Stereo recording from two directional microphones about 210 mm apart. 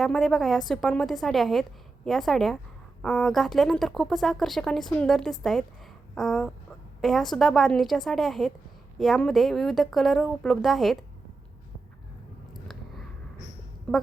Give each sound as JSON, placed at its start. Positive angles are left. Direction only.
{"t": 0.0, "sound": "speech", "side_deg": 0}
{"t": 13.9, "sound": "speech", "side_deg": 5}